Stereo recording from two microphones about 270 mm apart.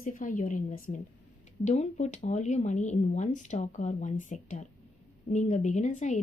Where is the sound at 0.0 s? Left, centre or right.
Left.